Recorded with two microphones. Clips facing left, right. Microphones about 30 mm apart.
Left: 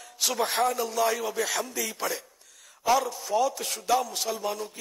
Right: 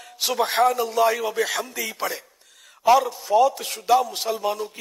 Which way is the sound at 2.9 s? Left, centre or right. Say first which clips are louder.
Right 7 dB; centre.